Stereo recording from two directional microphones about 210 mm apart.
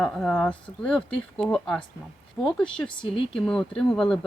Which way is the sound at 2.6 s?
25° left (ahead or behind).